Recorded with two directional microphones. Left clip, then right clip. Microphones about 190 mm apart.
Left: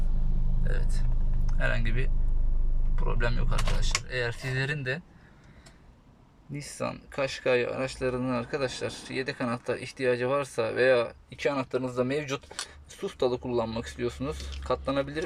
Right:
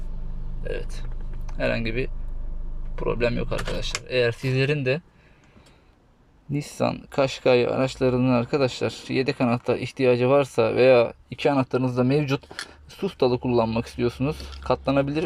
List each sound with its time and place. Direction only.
0.6 s a sound: 15° right (ahead or behind)
1.5 s speech: 15° right (ahead or behind)
6.5 s speech: 15° right (ahead or behind)